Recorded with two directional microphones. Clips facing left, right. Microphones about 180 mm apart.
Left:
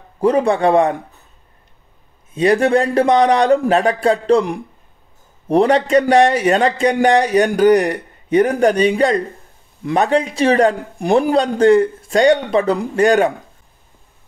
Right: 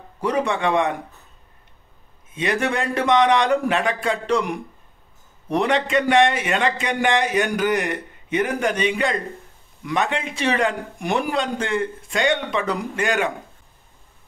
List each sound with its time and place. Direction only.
0.2 s a man's voice: 30° left (ahead or behind)
2.3 s a man's voice: 35° left (ahead or behind)